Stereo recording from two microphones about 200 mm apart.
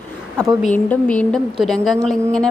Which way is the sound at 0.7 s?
5° left (ahead or behind).